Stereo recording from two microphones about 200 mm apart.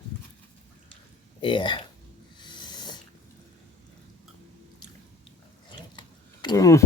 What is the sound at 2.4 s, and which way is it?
Owl, 20° left (ahead or behind).